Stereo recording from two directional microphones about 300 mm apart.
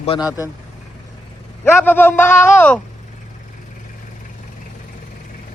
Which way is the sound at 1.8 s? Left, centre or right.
Centre.